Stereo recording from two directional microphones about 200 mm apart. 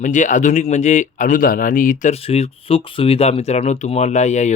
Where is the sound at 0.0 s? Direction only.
40° left (ahead or behind).